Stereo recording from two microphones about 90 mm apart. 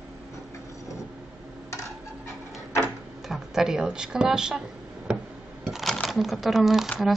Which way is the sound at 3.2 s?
5° right (ahead or behind).